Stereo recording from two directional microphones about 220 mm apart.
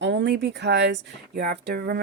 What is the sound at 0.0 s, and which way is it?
Speech, 55° right (ahead or behind).